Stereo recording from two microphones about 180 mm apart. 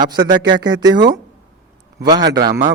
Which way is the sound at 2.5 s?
45° right (ahead or behind).